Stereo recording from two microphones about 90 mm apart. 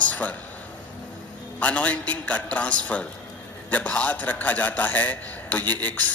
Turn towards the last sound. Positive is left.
turn(degrees=15)  # may be behind; listen again after turning